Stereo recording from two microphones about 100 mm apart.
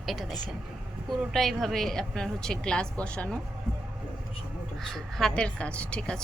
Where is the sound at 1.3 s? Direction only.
Centre (ahead or behind).